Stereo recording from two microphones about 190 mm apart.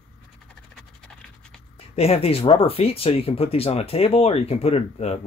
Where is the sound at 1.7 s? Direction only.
30° left (ahead or behind).